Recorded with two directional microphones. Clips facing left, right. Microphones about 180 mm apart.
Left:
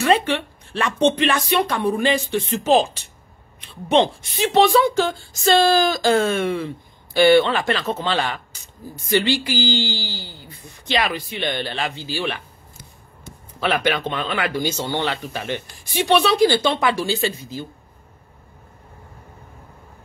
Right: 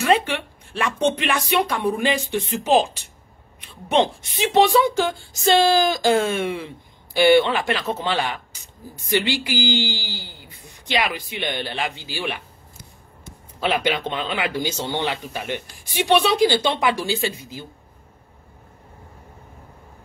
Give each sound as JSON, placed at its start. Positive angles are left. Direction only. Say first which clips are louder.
{"t": 0.0, "sound": "a woman's voice", "louder": "left 1 dB", "side_deg": -10}
{"t": 4.6, "sound": "a woman's voice", "louder": "left 1 dB", "side_deg": -15}
{"t": 13.6, "sound": "a woman's voice", "louder": "left 1 dB", "side_deg": -15}